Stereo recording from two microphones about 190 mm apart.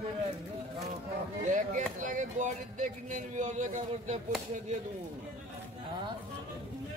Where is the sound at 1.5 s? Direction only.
40° right (ahead or behind).